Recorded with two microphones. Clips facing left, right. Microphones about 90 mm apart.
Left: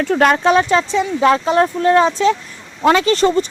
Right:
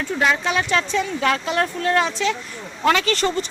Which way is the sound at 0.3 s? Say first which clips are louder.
Left 7 dB; 45° left (ahead or behind).